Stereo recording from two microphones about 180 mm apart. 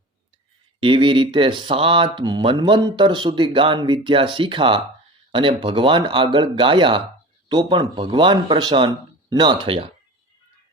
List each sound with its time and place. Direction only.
0.8 s speech: 30° right (ahead or behind)